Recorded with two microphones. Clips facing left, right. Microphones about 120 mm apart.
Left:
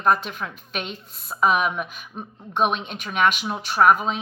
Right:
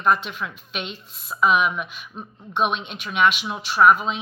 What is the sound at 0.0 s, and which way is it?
Speech, 40° left (ahead or behind).